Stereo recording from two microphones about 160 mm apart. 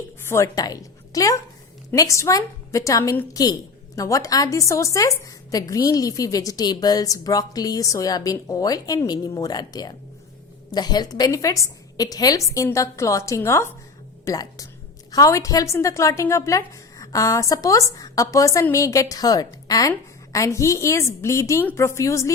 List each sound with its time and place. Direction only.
0.3 s a woman's voice: 20° left (ahead or behind)